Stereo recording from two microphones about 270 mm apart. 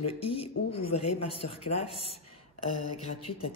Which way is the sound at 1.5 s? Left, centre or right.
Left.